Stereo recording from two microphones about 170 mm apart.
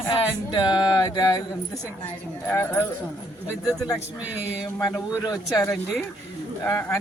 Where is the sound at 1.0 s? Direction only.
20° left (ahead or behind).